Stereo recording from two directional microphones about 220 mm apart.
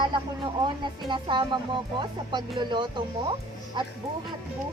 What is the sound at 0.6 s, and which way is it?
Speech, 20° right (ahead or behind).